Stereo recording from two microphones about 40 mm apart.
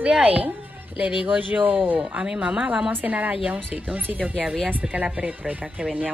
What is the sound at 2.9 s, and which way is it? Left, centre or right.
A woman's voice, right.